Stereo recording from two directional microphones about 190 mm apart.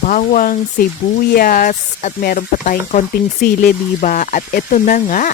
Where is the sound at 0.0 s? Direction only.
40° left (ahead or behind).